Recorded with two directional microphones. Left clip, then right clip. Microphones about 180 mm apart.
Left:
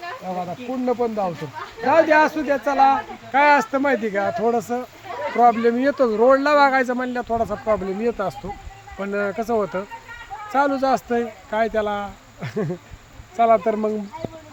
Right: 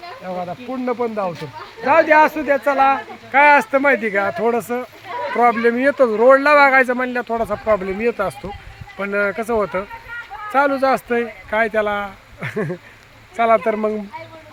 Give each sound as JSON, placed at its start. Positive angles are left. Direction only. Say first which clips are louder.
{"t": 0.9, "sound": "speech", "louder": "right 1 dB", "side_deg": -20}